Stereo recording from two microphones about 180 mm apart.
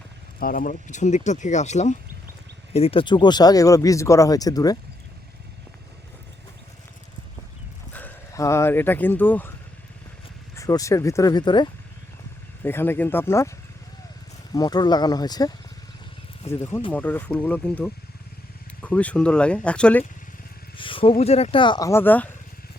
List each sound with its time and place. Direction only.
0.3 s speech: 50° left (ahead or behind); by 4.8 s 20° left (ahead or behind)
7.9 s speech: 15° left (ahead or behind)
10.5 s speech: 20° left (ahead or behind)
12.6 s speech: 10° left (ahead or behind)
14.5 s speech: 20° left (ahead or behind)
20.7 s speech: 30° left (ahead or behind); by 22.3 s 10° left (ahead or behind)